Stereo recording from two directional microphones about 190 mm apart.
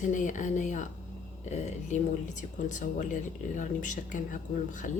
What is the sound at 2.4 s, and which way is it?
A woman's voice, 40° left (ahead or behind).